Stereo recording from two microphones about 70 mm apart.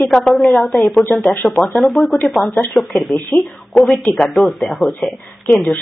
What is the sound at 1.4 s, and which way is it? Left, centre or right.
Speech, left.